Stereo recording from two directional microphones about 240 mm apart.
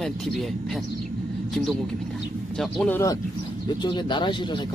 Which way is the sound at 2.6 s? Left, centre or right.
Centre.